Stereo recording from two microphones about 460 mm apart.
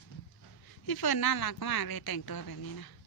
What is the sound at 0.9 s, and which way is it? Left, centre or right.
Speech, left.